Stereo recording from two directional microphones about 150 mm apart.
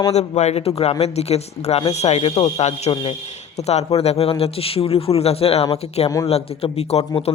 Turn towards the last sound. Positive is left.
turn(degrees=45)  # may be behind; listen again after turning